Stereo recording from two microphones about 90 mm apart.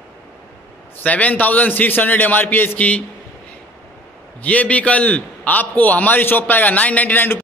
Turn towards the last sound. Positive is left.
turn(degrees=20)  # may be behind; listen again after turning